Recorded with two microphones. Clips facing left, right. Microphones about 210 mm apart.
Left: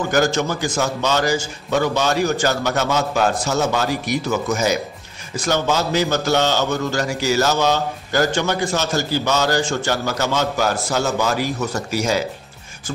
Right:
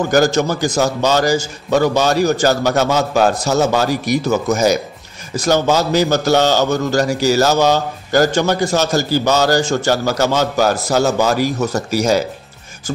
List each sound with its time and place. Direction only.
0.1 s a man's voice: 40° right (ahead or behind)